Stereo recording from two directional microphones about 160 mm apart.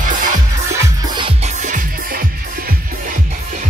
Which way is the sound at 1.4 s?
50° right (ahead or behind).